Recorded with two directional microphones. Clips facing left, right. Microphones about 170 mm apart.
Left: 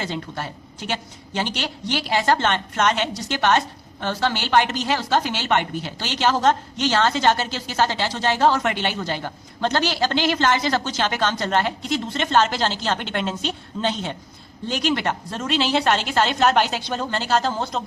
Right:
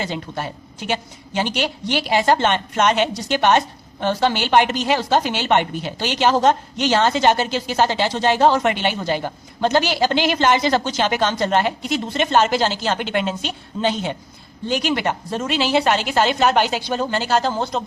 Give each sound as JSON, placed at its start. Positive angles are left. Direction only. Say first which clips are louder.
{"t": 0.0, "sound": "a woman's voice", "louder": "right 2 dB", "side_deg": -15}